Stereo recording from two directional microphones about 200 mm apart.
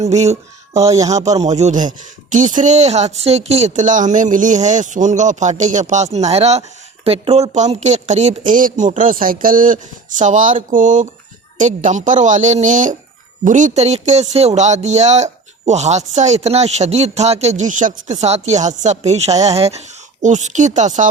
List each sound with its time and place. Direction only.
0.0 s speech: 35° right (ahead or behind)
0.8 s speech: 15° right (ahead or behind)
1.0 s speech: 35° right (ahead or behind)